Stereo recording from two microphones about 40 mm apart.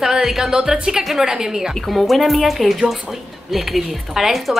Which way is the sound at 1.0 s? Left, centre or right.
Centre.